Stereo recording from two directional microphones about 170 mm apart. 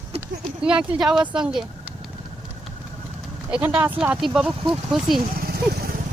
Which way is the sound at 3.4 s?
10° right (ahead or behind).